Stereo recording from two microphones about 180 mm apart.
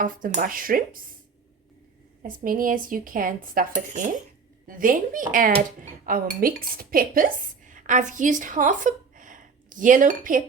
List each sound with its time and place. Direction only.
0.0 s speech: 50° right (ahead or behind)
2.2 s speech: 50° right (ahead or behind)